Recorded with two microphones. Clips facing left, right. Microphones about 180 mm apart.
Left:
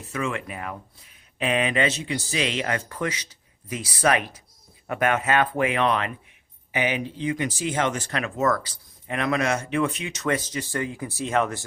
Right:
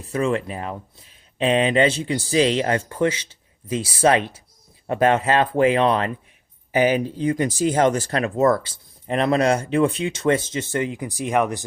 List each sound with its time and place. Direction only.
0.0 s speech: 35° right (ahead or behind); by 11.6 s 15° right (ahead or behind)